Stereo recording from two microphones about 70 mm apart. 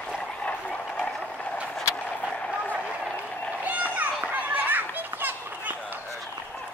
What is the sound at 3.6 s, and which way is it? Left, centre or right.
Children playing, right.